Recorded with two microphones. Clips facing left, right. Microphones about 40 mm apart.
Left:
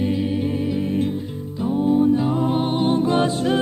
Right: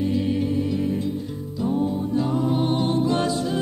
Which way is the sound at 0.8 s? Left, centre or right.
Left.